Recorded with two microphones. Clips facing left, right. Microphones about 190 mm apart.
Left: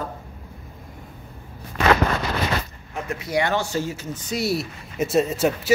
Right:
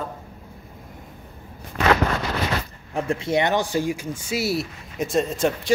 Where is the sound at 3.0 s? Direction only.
30° right (ahead or behind); by 5.7 s 5° left (ahead or behind).